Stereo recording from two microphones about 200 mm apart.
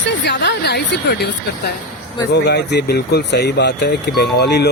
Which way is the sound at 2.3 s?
55° left (ahead or behind).